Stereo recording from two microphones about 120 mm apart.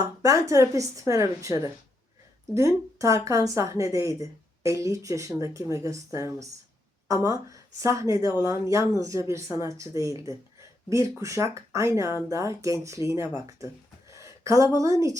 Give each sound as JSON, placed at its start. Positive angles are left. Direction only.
{"t": 0.0, "sound": "a woman's voice", "side_deg": -25}